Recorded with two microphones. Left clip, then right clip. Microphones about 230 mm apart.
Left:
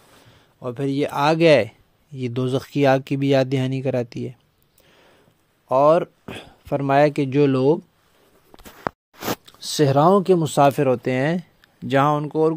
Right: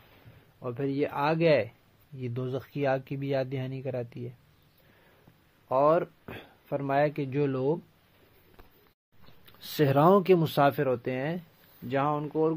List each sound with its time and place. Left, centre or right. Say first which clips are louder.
0.6 s speech: left 7 dB; left
5.7 s speech: left 8 dB; left
9.6 s speech: left 7 dB; left